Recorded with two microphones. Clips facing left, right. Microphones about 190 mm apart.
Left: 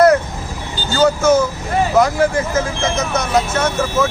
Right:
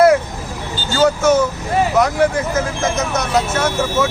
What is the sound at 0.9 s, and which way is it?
Speech, centre (ahead or behind).